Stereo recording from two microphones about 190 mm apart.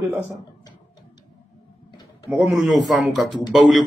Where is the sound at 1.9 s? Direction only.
20° left (ahead or behind).